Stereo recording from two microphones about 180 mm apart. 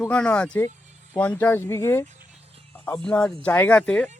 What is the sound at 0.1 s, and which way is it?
Speech, 5° left (ahead or behind).